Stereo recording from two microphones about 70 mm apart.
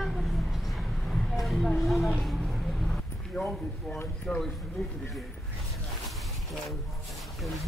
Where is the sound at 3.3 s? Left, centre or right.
Centre.